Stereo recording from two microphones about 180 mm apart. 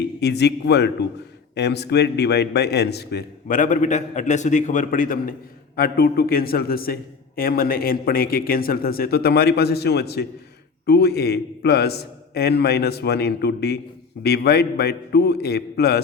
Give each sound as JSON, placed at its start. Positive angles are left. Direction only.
{"t": 0.2, "sound": "a man's voice", "side_deg": 70}